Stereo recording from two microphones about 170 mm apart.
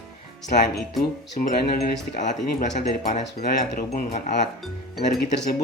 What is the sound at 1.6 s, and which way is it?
Speech, 70° left (ahead or behind).